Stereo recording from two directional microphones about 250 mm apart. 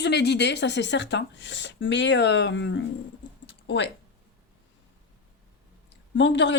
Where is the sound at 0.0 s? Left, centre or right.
Left.